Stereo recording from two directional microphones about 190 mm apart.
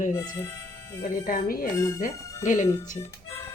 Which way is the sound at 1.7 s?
15° left (ahead or behind).